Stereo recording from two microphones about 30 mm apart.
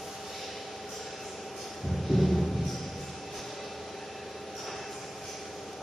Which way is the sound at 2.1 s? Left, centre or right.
Centre.